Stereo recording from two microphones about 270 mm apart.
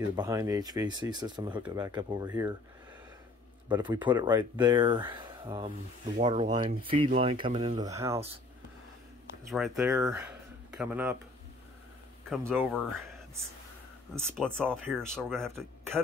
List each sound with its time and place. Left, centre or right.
0.1 s speech: centre
3.6 s speech: centre
9.5 s speech: centre
12.3 s speech: centre
14.1 s speech: centre